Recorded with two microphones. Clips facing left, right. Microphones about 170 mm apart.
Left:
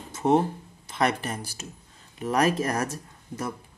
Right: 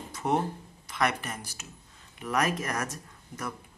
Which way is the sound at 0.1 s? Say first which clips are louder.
Left 7 dB; 25° left (ahead or behind).